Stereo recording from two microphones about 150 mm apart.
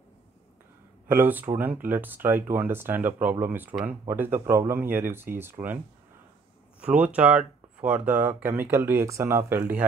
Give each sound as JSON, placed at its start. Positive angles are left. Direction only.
{"t": 1.0, "sound": "speech", "side_deg": -15}
{"t": 6.8, "sound": "speech", "side_deg": -10}